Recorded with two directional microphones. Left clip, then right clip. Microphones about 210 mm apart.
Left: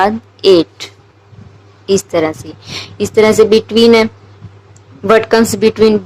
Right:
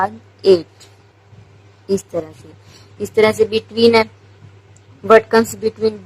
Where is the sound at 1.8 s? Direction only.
25° left (ahead or behind).